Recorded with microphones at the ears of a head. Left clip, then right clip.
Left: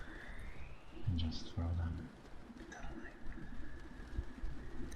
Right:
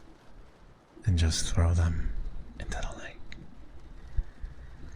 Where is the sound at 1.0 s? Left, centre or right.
Right.